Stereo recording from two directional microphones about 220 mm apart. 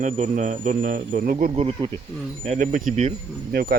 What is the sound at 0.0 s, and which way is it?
Speech, 35° right (ahead or behind).